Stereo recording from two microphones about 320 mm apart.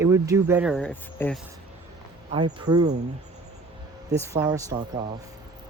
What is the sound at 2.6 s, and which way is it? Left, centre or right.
Speech, centre.